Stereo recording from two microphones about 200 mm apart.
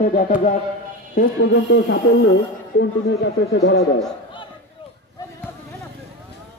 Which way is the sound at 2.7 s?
75° left (ahead or behind).